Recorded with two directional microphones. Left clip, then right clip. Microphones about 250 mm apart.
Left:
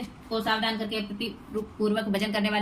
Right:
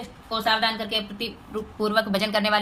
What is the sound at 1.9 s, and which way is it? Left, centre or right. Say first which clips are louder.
Speech: right 10 dB; centre.